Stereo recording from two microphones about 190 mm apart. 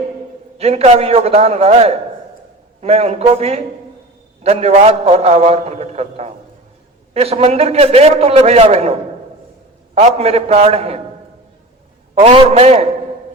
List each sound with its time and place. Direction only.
0.6 s a man's voice: 35° right (ahead or behind)
12.2 s a man's voice: 35° right (ahead or behind)